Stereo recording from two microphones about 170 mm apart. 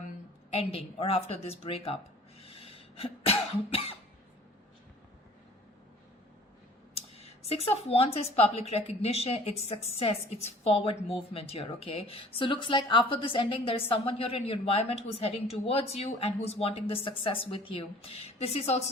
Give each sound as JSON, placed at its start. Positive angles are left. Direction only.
{"t": 0.5, "sound": "a woman's voice", "side_deg": 35}
{"t": 2.4, "sound": "cough", "side_deg": 35}
{"t": 7.4, "sound": "a woman's voice", "side_deg": 35}